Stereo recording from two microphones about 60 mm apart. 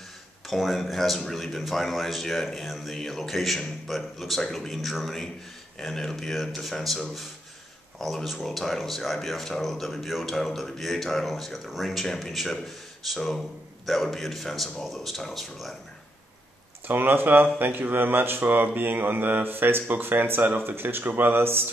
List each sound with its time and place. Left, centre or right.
0.5 s a man's voice: centre
16.8 s speech: right